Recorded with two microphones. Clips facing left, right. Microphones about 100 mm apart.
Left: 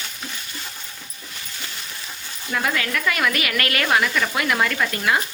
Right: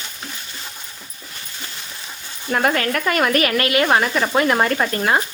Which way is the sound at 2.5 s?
45° right (ahead or behind).